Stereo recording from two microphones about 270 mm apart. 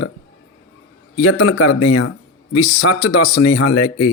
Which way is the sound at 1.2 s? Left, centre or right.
Left.